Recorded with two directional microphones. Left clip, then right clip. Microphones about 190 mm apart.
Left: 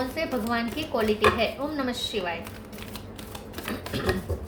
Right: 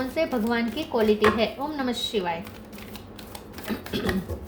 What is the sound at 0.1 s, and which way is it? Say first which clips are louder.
A woman's voice: right 3 dB; 45° right (ahead or behind).